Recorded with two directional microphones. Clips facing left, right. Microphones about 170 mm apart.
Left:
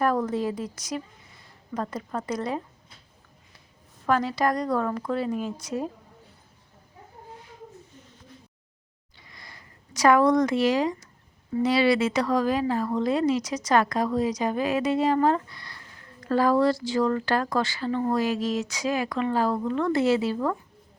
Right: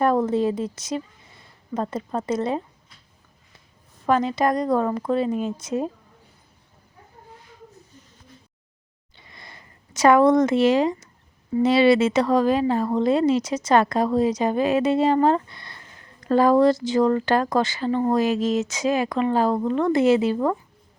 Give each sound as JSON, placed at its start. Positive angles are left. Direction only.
{"t": 0.0, "sound": "speech", "side_deg": -25}
{"t": 4.0, "sound": "speech", "side_deg": -20}
{"t": 9.1, "sound": "a sound", "side_deg": -25}
{"t": 11.5, "sound": "speech", "side_deg": -25}